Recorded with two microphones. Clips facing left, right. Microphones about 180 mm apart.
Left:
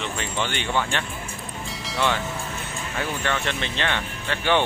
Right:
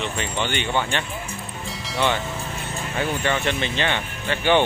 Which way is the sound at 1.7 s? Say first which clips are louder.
Right 2 dB; centre (ahead or behind).